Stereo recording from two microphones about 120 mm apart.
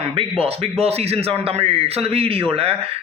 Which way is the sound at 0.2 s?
55° right (ahead or behind).